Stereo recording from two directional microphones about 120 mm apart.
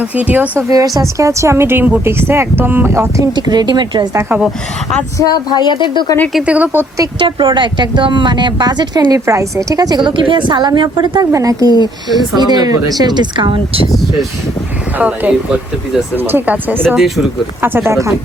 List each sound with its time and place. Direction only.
0.0 s speech: 15° right (ahead or behind)
0.7 s speech: 30° right (ahead or behind)
3.3 s speech: 35° right (ahead or behind)
4.2 s speech: 15° right (ahead or behind)
5.1 s a woman's voice: 35° left (ahead or behind)
6.3 s speech: 10° right (ahead or behind)
7.2 s speech: 45° right (ahead or behind)
11.3 s speech: 25° right (ahead or behind)
14.9 s speech: 15° right (ahead or behind)